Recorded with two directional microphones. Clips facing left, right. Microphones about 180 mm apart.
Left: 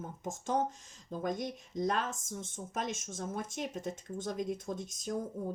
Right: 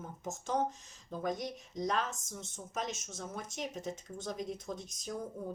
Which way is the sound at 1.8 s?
50° left (ahead or behind).